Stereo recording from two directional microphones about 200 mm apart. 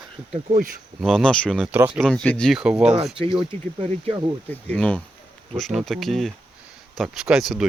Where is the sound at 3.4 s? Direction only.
30° right (ahead or behind).